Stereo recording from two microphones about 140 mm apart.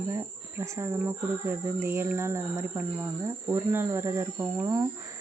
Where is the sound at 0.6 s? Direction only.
20° right (ahead or behind).